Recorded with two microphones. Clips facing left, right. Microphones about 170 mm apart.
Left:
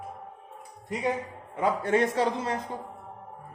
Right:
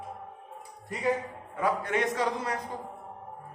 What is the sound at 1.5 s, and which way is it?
A man's voice, 25° left (ahead or behind).